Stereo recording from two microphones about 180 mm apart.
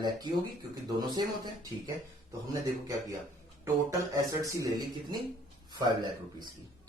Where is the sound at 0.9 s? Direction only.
25° right (ahead or behind).